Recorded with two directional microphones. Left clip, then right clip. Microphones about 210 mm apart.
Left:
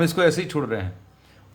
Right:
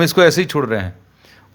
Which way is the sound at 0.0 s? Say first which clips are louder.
Right 8 dB; 45° right (ahead or behind).